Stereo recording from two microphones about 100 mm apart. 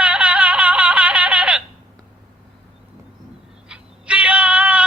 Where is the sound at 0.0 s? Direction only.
15° right (ahead or behind).